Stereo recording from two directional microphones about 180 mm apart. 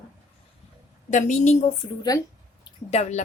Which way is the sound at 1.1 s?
40° left (ahead or behind).